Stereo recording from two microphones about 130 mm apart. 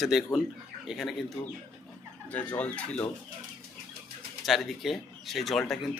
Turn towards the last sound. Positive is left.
turn(degrees=0)  # may be behind; listen again after turning